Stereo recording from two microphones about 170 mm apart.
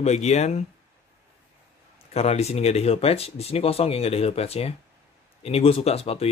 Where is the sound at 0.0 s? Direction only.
40° left (ahead or behind).